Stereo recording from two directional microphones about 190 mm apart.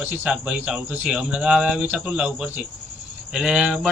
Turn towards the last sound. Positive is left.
turn(degrees=-5)  # may be behind; listen again after turning